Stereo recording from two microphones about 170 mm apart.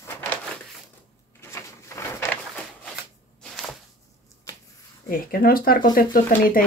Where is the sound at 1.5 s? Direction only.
15° left (ahead or behind).